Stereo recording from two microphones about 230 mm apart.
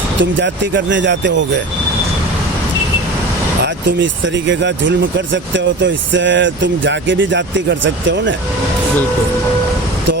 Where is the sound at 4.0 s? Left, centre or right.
Right.